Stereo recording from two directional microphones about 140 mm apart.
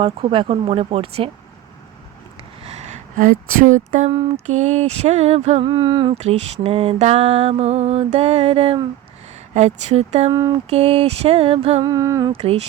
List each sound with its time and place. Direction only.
0.0 s mantra: 40° right (ahead or behind)
2.6 s speech: 55° right (ahead or behind)
4.4 s mantra: 55° right (ahead or behind)
5.7 s speech: 35° right (ahead or behind)
6.1 s mantra: 50° right (ahead or behind)
10.3 s a sound: 30° right (ahead or behind)
10.7 s mantra: 50° right (ahead or behind)
11.9 s a sound: 25° right (ahead or behind)
12.3 s mantra: 45° right (ahead or behind)